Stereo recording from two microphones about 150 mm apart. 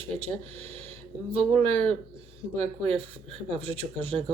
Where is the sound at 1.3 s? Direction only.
40° right (ahead or behind).